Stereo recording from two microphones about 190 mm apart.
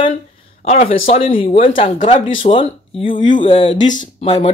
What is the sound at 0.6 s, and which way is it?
Speech, 35° left (ahead or behind).